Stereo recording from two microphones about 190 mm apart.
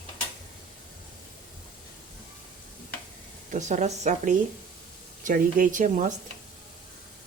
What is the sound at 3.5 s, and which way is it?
A woman's voice, 40° right (ahead or behind).